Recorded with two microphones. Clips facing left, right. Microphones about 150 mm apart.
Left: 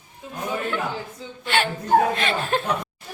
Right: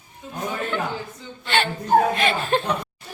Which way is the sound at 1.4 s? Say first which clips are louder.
Even; 5° left (ahead or behind).